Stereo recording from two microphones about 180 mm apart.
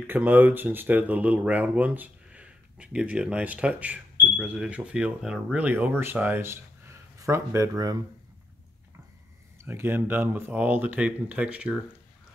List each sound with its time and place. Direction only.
0.0 s speech: 10° right (ahead or behind)
9.6 s speech: 15° right (ahead or behind)